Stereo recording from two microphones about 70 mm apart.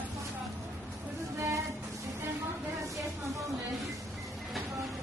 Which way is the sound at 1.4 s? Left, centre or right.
Right.